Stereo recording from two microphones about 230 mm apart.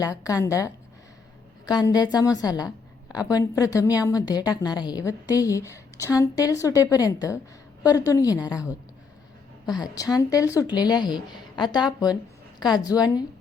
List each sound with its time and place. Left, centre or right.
0.0 s a woman's voice: centre